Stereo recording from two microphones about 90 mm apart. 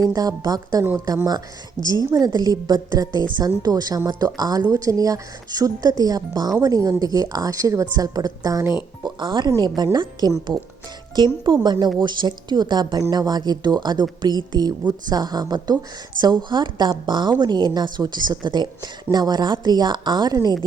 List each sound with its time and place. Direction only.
0.0 s speech: 45° right (ahead or behind)
9.0 s speech: 55° right (ahead or behind)
11.4 s speech: 55° right (ahead or behind)